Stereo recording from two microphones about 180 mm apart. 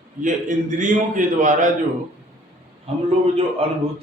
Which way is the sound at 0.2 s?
45° right (ahead or behind).